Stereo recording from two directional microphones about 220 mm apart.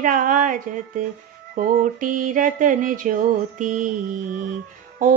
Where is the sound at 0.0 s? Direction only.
35° right (ahead or behind).